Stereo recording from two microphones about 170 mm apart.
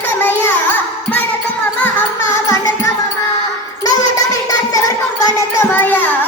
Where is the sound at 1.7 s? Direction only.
15° left (ahead or behind).